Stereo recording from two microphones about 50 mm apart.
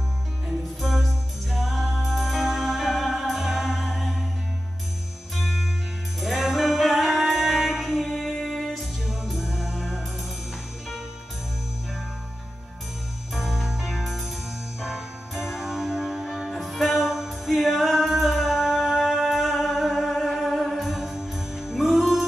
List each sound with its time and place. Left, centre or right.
0.7 s music: centre
5.3 s music: centre
13.3 s music: centre